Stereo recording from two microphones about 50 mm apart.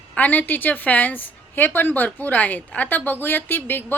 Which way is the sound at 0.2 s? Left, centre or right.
Left.